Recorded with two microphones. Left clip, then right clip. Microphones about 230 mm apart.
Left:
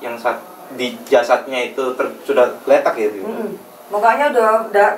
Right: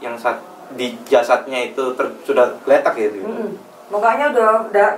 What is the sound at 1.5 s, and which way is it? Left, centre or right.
A man's voice, right.